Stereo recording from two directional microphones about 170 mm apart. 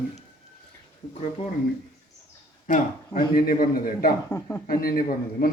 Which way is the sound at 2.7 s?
50° left (ahead or behind).